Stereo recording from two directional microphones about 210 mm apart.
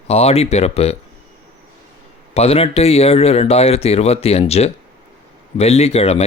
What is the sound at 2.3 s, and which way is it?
Speech, 30° left (ahead or behind).